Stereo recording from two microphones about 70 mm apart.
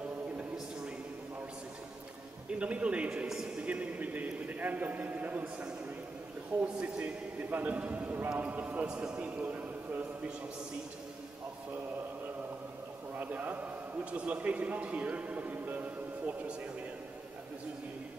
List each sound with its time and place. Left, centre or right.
0.4 s a sound: centre
2.6 s a man's voice: centre
13.2 s a man's voice: right